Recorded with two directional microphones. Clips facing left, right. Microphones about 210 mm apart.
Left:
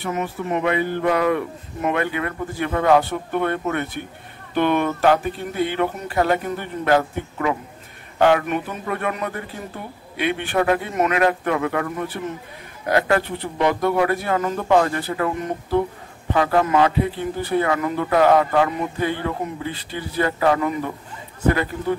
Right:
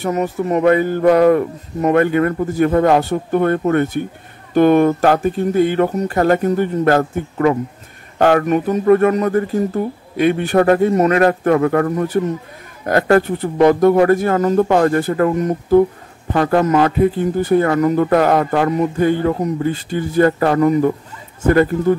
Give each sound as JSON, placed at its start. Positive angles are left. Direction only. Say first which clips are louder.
{"t": 0.0, "sound": "speech", "louder": "right 7 dB", "side_deg": -40}